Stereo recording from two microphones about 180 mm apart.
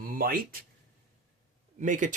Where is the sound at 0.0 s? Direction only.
55° right (ahead or behind).